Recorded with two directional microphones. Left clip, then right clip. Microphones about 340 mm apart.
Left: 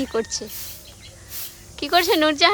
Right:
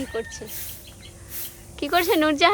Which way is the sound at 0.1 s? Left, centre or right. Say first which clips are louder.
Left 6 dB; centre.